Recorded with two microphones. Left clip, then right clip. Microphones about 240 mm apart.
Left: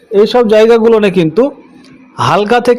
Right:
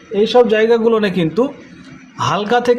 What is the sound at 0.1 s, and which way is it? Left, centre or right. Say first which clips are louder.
A man's voice: left 4 dB; left.